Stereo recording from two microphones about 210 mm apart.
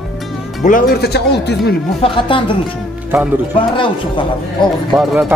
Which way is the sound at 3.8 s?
25° left (ahead or behind).